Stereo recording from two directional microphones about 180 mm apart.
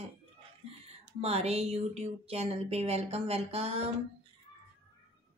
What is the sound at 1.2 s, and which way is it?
Speech, 35° right (ahead or behind).